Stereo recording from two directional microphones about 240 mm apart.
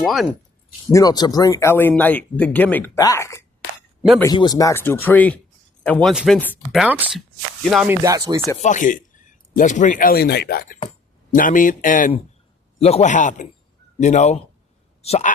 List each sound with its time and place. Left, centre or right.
0.0 s speech: centre
0.9 s speech: centre
8.0 s speech: centre
8.6 s a man's voice: left